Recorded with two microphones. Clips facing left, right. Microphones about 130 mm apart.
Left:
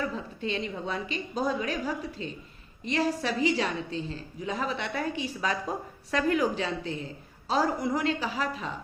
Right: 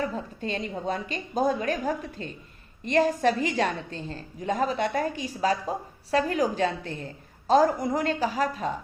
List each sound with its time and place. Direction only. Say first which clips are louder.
0.0 s a woman's voice: right 2 dB; 45° right (ahead or behind)